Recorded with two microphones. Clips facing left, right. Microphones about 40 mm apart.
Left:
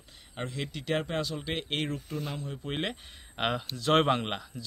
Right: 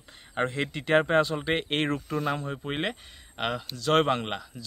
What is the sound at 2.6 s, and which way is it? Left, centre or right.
Speech, right.